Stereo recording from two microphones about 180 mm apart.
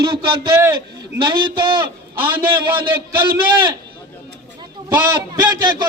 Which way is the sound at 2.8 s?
55° right (ahead or behind).